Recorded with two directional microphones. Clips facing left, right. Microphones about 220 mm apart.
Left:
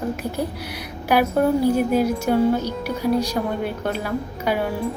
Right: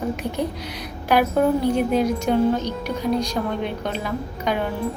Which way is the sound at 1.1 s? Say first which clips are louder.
Even; 10° left (ahead or behind).